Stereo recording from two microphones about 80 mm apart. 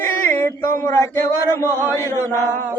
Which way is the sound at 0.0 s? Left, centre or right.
Left.